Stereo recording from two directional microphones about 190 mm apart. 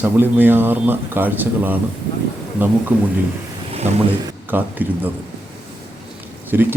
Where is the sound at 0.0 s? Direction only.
10° right (ahead or behind).